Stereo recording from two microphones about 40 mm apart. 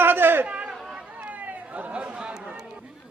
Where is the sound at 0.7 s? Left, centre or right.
Centre.